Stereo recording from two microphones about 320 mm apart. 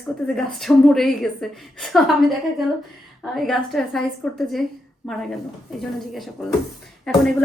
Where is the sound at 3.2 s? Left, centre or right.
Centre.